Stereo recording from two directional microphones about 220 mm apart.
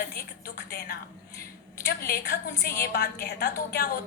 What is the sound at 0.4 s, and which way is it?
A woman's voice, 45° left (ahead or behind).